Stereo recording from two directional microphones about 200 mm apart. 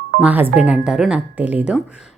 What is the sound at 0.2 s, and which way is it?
A woman's voice, 10° right (ahead or behind).